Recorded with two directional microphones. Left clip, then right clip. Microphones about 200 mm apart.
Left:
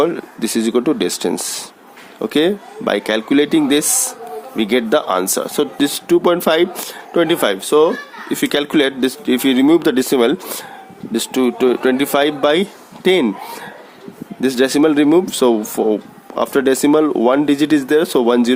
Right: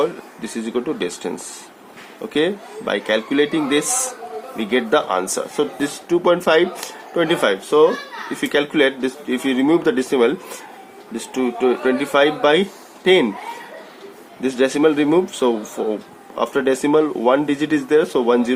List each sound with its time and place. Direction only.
0.0 s speech: 55° left (ahead or behind)
14.4 s speech: 50° left (ahead or behind)